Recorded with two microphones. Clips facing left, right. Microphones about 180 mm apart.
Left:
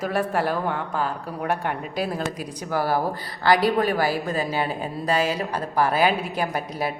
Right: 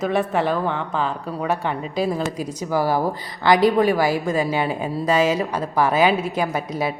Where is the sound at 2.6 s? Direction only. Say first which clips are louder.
Right 3 dB; 15° right (ahead or behind).